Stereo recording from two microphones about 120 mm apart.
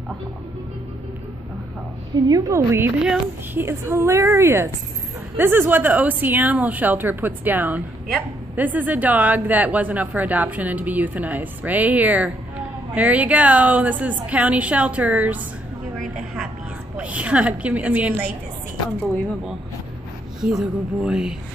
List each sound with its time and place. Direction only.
2.2 s a woman's voice: 30° right (ahead or behind); by 15.3 s 10° right (ahead or behind)
16.9 s a woman's voice: 10° right (ahead or behind)
20.4 s speech: 5° right (ahead or behind)